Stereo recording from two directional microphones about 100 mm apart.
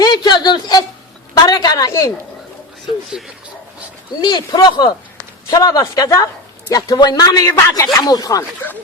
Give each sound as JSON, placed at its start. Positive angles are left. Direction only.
{"t": 0.0, "sound": "a sound", "side_deg": 45}
{"t": 1.9, "sound": "speech", "side_deg": 30}
{"t": 4.2, "sound": "speech", "side_deg": 45}